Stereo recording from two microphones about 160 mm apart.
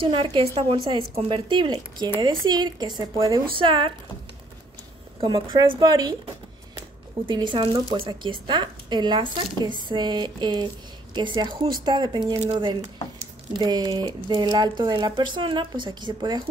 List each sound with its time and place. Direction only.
0.0 s a woman's voice: 30° right (ahead or behind)
5.2 s a woman's voice: 30° right (ahead or behind)